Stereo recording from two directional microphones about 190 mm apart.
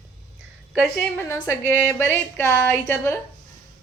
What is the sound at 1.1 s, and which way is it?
A woman's voice, 10° left (ahead or behind).